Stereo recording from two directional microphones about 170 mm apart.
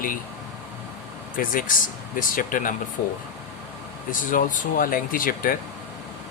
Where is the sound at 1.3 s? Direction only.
55° left (ahead or behind).